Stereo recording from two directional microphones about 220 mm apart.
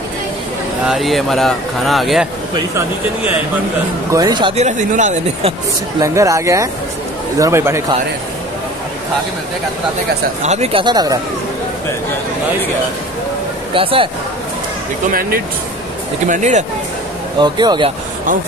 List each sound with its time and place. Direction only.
0.8 s speech: centre (ahead or behind)
4.1 s speech: 20° right (ahead or behind); by 5.5 s 35° right (ahead or behind)
5.9 s speech: 15° right (ahead or behind)
10.4 s speech: 30° right (ahead or behind)
13.7 s speech: 25° right (ahead or behind)
15.0 s speech: 40° right (ahead or behind)
17.4 s speech: 20° right (ahead or behind)